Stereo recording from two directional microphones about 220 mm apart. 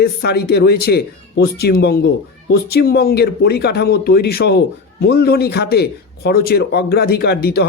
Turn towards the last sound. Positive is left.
turn(degrees=45)  # may be behind; listen again after turning